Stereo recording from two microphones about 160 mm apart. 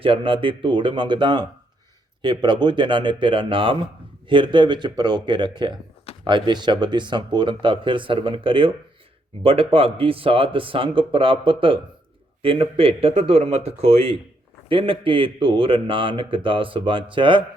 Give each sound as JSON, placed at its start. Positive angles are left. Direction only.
{"t": 0.0, "sound": "speech", "side_deg": -35}